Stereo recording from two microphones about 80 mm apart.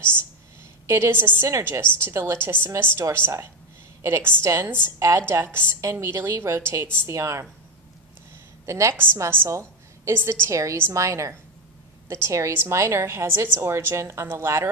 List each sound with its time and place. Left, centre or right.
0.8 s a woman's voice: right
4.9 s a woman's voice: right
5.3 s a woman's voice: right
8.6 s a woman's voice: right
8.9 s a woman's voice: right
9.5 s a sound: right
10.5 s a woman's voice: right